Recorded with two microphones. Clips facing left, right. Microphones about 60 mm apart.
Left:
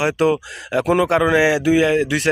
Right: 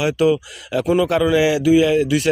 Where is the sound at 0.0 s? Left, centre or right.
Left.